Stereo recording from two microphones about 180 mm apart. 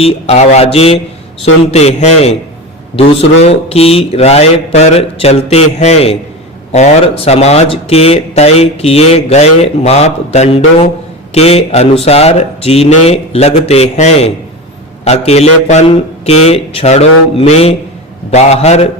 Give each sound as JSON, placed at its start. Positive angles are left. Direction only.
{"t": 0.0, "sound": "speech", "side_deg": 35}